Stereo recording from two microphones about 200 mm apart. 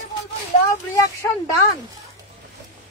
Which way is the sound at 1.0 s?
15° left (ahead or behind).